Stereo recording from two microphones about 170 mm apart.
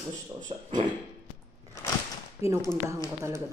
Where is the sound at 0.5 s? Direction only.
30° right (ahead or behind).